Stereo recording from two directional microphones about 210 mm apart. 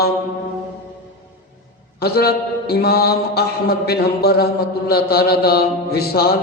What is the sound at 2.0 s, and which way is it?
A man's voice, 50° left (ahead or behind).